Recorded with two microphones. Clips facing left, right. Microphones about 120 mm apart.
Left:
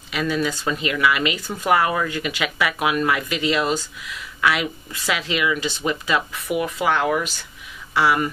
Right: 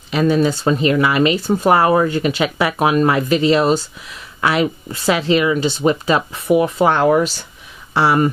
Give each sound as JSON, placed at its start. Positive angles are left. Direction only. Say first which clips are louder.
{"t": 0.1, "sound": "speech", "louder": "right 8 dB", "side_deg": -35}